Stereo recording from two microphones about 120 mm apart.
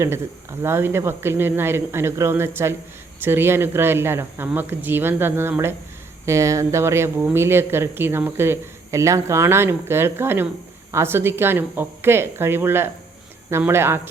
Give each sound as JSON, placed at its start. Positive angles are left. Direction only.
{"t": 0.6, "sound": "speech", "side_deg": -20}